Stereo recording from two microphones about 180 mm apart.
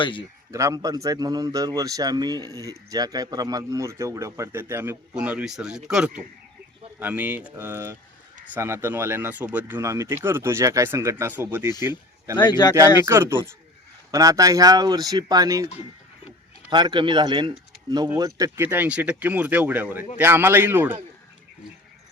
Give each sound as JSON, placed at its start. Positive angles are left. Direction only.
{"t": 0.0, "sound": "speech", "side_deg": 25}
{"t": 0.5, "sound": "a man's voice", "side_deg": -20}
{"t": 12.4, "sound": "speech", "side_deg": 25}
{"t": 13.1, "sound": "speech", "side_deg": -15}